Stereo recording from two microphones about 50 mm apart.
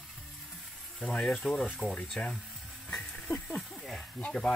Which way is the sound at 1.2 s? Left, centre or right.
Centre.